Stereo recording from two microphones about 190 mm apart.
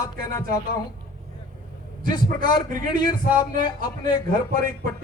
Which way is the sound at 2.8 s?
20° left (ahead or behind).